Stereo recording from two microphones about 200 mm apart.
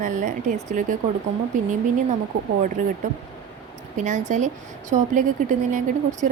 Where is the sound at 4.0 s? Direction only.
35° right (ahead or behind).